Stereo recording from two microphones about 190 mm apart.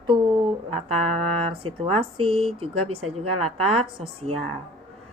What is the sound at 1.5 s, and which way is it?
A woman's voice, 30° right (ahead or behind).